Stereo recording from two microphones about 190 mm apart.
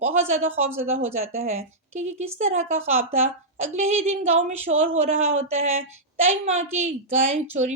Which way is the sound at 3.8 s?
35° right (ahead or behind).